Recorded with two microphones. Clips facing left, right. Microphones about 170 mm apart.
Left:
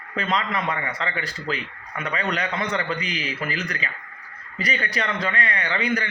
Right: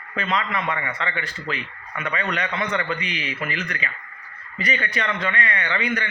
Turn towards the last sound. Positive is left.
turn(degrees=35)  # may be behind; listen again after turning